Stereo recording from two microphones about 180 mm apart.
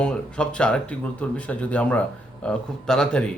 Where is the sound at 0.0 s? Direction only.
5° left (ahead or behind).